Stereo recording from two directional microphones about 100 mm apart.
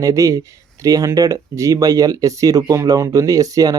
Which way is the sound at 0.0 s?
35° right (ahead or behind).